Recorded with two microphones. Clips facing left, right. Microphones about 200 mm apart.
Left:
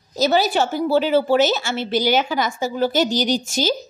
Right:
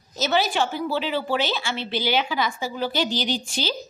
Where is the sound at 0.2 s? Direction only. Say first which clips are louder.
Left 5 dB; 40° left (ahead or behind).